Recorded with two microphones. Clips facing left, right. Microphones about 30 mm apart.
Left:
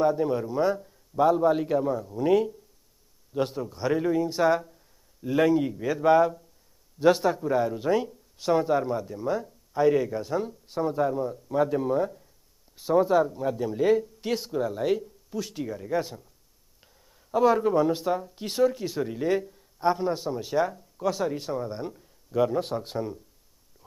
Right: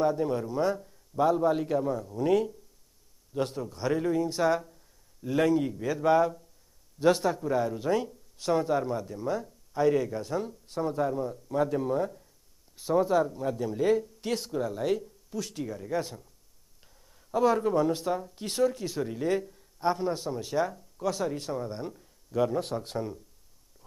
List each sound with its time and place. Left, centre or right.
0.0 s speech: centre